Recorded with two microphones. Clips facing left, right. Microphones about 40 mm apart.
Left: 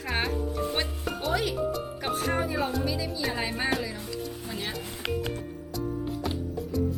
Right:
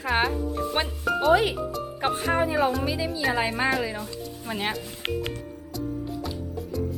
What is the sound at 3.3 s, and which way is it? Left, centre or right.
Speech, right.